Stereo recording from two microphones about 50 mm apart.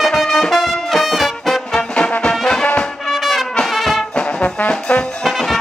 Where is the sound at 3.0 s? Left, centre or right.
Centre.